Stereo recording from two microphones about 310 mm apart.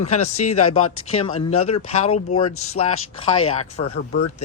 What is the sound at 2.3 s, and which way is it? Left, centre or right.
Speech, centre.